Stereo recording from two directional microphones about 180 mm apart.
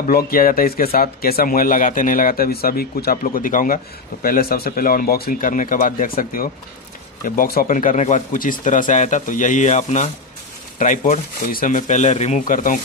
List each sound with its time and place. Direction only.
0.0 s speech: 55° left (ahead or behind)